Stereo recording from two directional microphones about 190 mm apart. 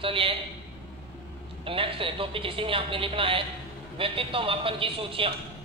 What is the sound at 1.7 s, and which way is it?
Speech, 30° right (ahead or behind).